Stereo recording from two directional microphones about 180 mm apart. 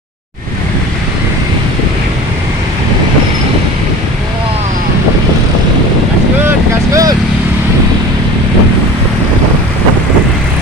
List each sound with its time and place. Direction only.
6.9 s vehicle: 20° right (ahead or behind)